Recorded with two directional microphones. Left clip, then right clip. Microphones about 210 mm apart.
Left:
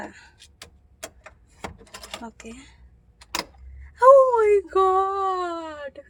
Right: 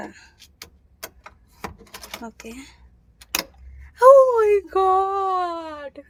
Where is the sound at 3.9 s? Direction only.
20° right (ahead or behind).